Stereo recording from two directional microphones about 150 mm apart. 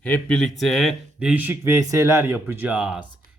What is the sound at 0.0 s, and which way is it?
Speech, 10° left (ahead or behind).